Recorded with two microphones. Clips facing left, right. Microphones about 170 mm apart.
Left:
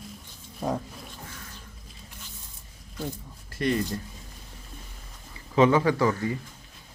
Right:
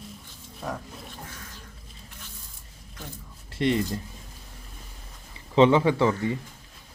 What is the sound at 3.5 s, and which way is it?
Speech, 25° right (ahead or behind).